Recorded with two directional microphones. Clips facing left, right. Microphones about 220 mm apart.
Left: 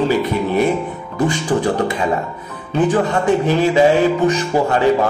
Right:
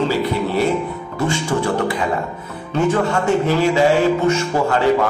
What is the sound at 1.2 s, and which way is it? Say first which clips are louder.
A man's voice: left 3 dB; 20° left (ahead or behind).